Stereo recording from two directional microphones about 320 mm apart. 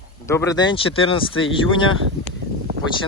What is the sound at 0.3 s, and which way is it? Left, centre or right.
Speech, centre.